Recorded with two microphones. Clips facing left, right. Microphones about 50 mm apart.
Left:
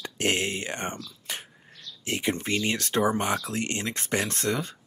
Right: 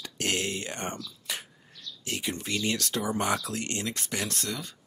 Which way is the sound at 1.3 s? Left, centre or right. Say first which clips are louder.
Even; left.